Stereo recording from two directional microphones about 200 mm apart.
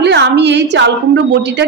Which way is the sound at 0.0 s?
60° right (ahead or behind).